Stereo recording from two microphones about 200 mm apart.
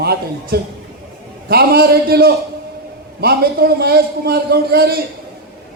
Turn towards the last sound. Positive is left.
turn(degrees=-50)  # may be behind; listen again after turning